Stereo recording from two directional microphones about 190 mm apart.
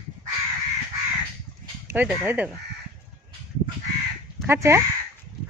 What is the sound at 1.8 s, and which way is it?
Speech, 10° right (ahead or behind).